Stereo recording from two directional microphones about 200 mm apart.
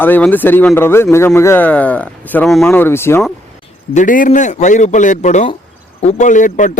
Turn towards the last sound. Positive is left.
turn(degrees=40)  # may be behind; listen again after turning